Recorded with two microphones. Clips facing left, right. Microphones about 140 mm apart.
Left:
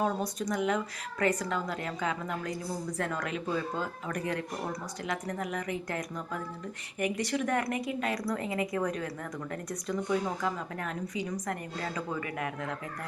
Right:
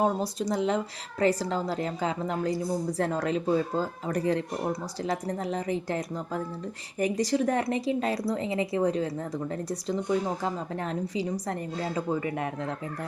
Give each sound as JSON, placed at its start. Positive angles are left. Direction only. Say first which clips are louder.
{"t": 0.0, "sound": "speech", "louder": "right 4 dB", "side_deg": -30}